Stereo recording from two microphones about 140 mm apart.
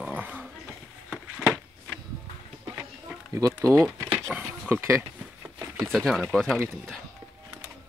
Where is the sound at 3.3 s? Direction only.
20° right (ahead or behind).